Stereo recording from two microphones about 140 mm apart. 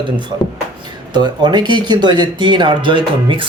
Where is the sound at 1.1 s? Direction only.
30° right (ahead or behind).